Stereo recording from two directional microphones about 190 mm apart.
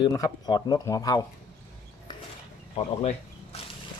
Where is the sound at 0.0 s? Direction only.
20° left (ahead or behind).